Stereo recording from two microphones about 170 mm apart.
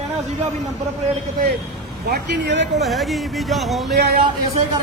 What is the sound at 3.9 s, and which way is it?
Speech, 65° right (ahead or behind).